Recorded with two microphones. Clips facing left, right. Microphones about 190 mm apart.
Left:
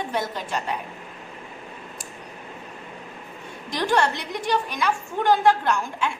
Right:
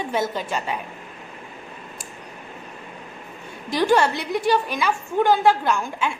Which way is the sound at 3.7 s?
5° right (ahead or behind).